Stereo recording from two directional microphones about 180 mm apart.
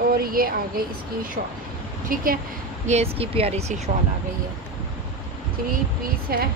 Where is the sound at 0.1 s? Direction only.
55° right (ahead or behind).